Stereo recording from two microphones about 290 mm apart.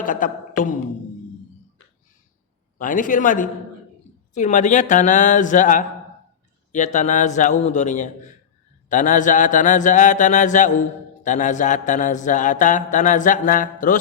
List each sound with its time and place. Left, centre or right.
0.0 s speech: left
2.7 s speech: left